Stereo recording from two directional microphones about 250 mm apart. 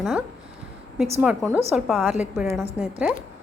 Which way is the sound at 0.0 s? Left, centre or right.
Centre.